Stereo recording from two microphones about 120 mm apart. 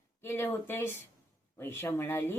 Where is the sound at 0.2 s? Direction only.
20° left (ahead or behind).